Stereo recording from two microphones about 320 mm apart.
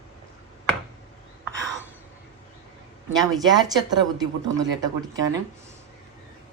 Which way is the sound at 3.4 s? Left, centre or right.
Centre.